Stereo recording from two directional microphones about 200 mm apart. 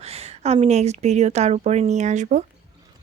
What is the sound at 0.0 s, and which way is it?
Speech, 30° right (ahead or behind).